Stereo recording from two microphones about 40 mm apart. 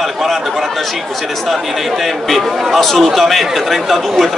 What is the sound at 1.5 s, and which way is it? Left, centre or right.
Speech, centre.